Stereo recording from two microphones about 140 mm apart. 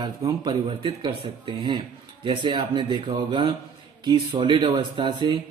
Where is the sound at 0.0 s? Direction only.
30° right (ahead or behind).